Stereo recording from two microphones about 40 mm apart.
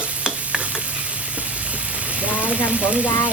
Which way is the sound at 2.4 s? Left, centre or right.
Right.